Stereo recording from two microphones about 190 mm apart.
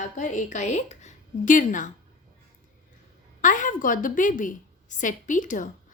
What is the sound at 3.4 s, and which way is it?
A woman's voice, 45° left (ahead or behind).